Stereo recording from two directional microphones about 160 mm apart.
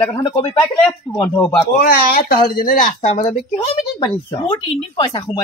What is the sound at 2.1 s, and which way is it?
Speech, 70° left (ahead or behind).